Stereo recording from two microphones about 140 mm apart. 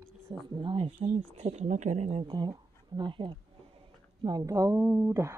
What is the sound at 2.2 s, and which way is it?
Speech, 30° right (ahead or behind).